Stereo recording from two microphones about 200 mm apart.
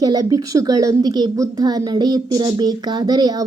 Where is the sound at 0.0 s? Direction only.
20° right (ahead or behind).